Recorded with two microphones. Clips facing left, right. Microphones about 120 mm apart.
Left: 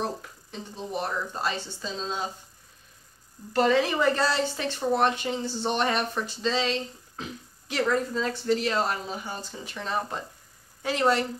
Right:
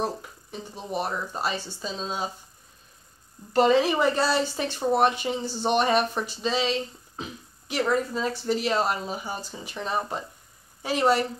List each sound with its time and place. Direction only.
0.5 s speech: 10° right (ahead or behind)
3.5 s speech: 20° right (ahead or behind)
7.2 s beatboxing: 15° right (ahead or behind)
7.8 s speech: 15° right (ahead or behind)